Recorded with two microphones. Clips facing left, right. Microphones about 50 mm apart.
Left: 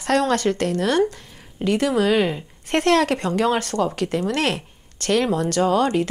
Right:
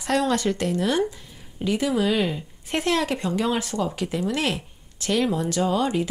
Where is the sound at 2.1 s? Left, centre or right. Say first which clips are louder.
Left 4 dB; left.